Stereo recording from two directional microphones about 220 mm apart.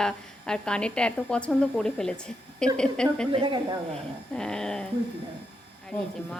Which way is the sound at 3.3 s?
20° right (ahead or behind).